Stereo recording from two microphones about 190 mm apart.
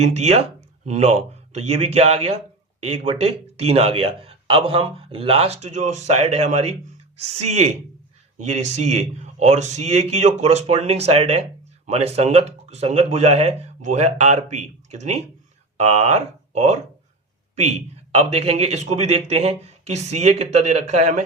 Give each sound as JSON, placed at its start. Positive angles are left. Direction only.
{"t": 0.0, "sound": "speech", "side_deg": -35}